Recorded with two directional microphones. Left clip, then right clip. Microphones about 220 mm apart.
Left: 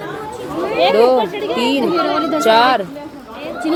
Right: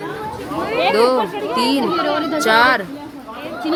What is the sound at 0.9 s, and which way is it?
Speech, 5° right (ahead or behind).